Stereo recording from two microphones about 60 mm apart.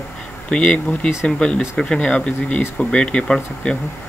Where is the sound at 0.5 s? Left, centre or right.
Centre.